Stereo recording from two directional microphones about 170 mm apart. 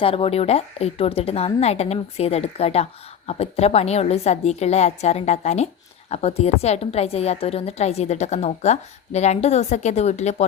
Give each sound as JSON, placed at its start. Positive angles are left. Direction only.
{"t": 0.0, "sound": "a woman's voice", "side_deg": 35}